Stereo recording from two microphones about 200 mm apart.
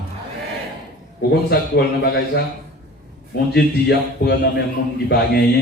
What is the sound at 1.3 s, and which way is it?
Speech, 55° left (ahead or behind).